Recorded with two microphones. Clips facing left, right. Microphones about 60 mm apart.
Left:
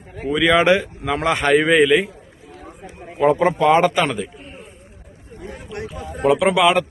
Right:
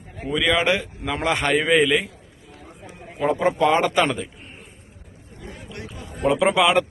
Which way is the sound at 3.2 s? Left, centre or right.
Left.